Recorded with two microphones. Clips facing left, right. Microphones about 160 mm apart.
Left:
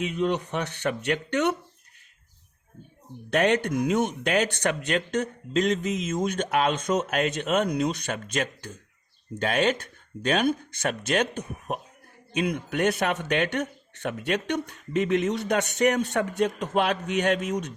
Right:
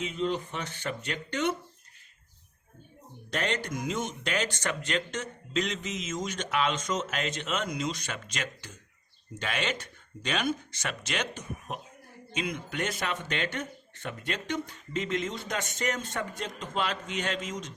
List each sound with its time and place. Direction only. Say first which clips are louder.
0.0 s speech: left 4 dB; 65° left (ahead or behind)
3.2 s speech: left 9 dB; 60° left (ahead or behind)